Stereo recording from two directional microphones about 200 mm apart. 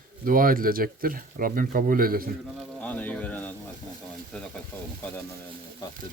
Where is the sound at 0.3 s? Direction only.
45° right (ahead or behind).